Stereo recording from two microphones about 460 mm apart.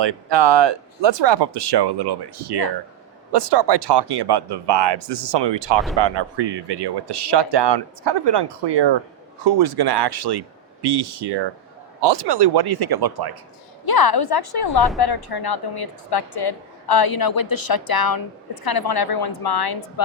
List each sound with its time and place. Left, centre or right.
0.0 s speech: right
13.8 s a woman's voice: left
14.8 s a woman's voice: centre
15.0 s a woman's voice: left